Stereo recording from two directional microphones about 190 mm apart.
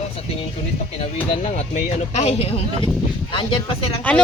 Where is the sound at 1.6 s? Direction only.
35° left (ahead or behind).